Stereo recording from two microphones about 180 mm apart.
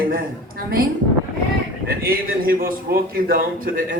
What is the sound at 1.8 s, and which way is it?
A woman's voice, 55° right (ahead or behind).